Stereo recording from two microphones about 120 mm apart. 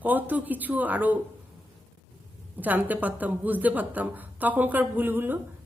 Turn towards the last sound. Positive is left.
turn(degrees=-15)  # may be behind; listen again after turning